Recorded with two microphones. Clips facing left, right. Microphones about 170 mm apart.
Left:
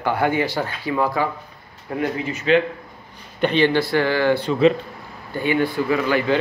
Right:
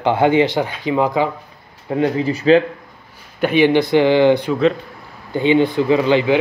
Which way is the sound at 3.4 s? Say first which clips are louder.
Right 4 dB; 10° right (ahead or behind).